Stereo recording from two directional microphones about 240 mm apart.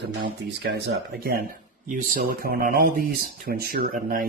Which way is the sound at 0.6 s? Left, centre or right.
Right.